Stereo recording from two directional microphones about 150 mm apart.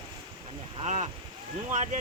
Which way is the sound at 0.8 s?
50° right (ahead or behind).